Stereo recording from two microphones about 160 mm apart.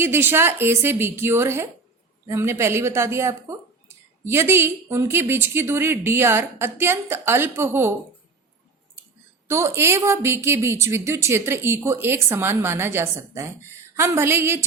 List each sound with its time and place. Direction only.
0.0 s speech: 15° right (ahead or behind)
9.5 s speech: 15° right (ahead or behind)